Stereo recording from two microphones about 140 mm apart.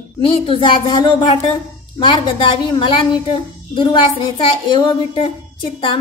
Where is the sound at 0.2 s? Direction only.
40° left (ahead or behind).